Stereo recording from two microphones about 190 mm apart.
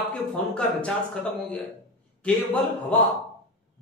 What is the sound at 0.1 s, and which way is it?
Speech, 5° left (ahead or behind).